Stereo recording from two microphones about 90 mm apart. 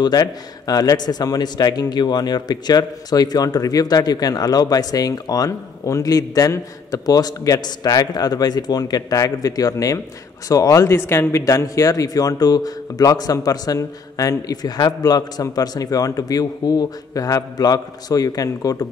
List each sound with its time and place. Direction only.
0.0 s a man's voice: 45° left (ahead or behind)